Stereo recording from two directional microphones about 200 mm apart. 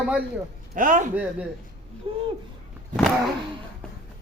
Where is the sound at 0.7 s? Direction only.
40° right (ahead or behind).